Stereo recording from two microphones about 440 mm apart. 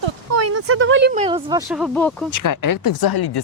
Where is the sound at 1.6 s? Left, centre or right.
Centre.